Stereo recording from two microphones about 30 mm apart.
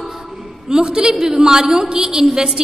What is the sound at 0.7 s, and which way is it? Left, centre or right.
A woman's voice, right.